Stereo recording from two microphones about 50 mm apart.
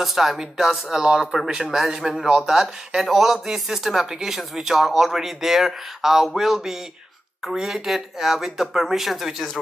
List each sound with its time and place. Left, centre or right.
0.0 s speech: centre
1.0 s speech: centre